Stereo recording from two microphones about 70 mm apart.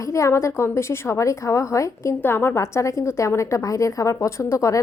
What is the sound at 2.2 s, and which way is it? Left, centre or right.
A woman's voice, left.